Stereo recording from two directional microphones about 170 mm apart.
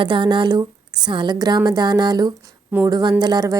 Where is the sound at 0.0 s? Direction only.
30° right (ahead or behind).